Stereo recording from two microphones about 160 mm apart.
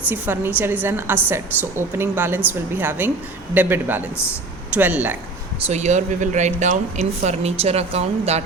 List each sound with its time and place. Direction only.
0.1 s a woman's voice: 15° right (ahead or behind)
5.6 s speech: 45° right (ahead or behind)